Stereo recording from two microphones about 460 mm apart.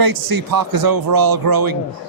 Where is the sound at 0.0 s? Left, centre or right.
Right.